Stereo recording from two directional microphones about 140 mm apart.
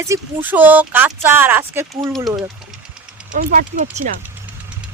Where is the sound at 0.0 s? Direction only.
15° right (ahead or behind).